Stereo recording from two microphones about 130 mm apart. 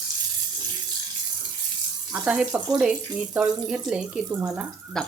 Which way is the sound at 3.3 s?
5° right (ahead or behind).